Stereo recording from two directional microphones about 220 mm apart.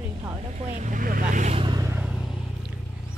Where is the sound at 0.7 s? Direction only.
35° right (ahead or behind); by 2.7 s centre (ahead or behind).